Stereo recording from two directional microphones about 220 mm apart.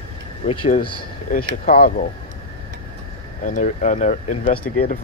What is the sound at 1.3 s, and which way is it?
Speech, 35° left (ahead or behind).